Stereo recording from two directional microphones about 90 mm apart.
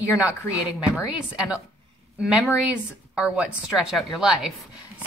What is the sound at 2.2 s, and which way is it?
A woman's voice, 5° right (ahead or behind).